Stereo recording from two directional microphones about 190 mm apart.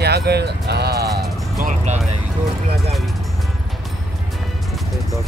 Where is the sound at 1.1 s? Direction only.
45° right (ahead or behind).